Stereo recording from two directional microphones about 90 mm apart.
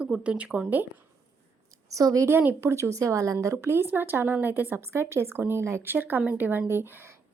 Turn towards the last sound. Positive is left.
turn(degrees=-25)  # may be behind; listen again after turning